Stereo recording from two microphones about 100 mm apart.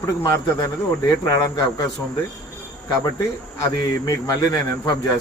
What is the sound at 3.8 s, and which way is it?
Speech, 40° left (ahead or behind).